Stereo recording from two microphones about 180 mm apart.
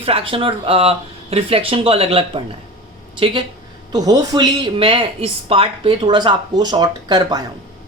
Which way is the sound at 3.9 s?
20° right (ahead or behind).